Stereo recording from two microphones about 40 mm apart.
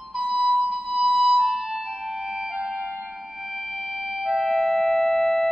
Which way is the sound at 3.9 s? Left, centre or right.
Centre.